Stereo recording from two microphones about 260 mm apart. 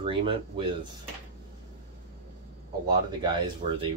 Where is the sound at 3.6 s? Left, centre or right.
Right.